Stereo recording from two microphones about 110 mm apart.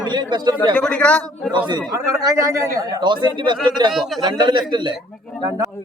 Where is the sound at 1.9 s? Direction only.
30° right (ahead or behind).